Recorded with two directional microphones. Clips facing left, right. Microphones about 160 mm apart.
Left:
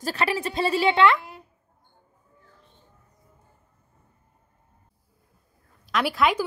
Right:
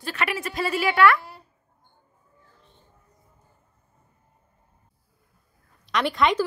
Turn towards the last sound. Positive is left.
turn(degrees=5)  # may be behind; listen again after turning